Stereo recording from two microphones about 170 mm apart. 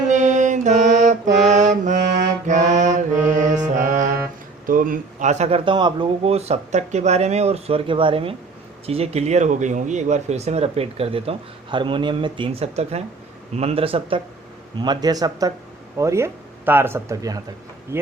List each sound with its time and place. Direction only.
0.1 s music: 45° right (ahead or behind)
1.5 s mantra: 45° right (ahead or behind)
4.6 s speech: 55° right (ahead or behind); by 18.1 s 15° right (ahead or behind)